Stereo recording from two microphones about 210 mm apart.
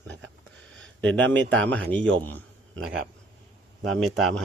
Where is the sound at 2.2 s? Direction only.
10° left (ahead or behind).